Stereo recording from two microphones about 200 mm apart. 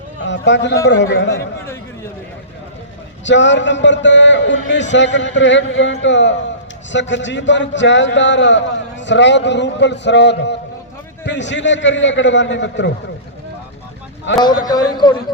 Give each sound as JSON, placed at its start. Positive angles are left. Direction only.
{"t": 0.3, "sound": "a man's voice", "side_deg": 65}
{"t": 3.2, "sound": "a man's voice", "side_deg": 65}
{"t": 14.3, "sound": "a man's voice", "side_deg": 65}
{"t": 14.6, "sound": "a man's voice", "side_deg": 20}